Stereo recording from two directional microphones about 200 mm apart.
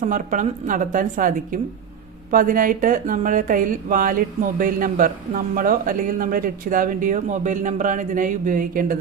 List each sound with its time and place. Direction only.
0.0 s a woman's voice: 40° right (ahead or behind)